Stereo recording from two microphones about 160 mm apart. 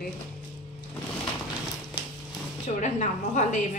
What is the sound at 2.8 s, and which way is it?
A woman's voice, 50° left (ahead or behind).